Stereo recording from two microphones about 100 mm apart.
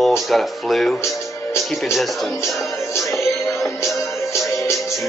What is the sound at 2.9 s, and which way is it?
Music, 30° left (ahead or behind).